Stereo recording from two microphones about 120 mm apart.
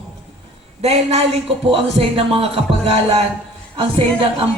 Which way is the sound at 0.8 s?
60° right (ahead or behind).